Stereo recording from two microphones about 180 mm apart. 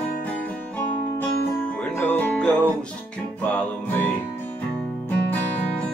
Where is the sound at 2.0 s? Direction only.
10° left (ahead or behind).